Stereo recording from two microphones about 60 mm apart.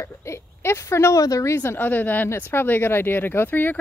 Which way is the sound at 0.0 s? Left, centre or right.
Left.